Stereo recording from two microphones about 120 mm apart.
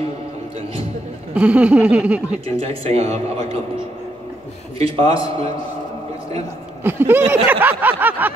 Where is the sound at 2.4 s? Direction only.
55° right (ahead or behind).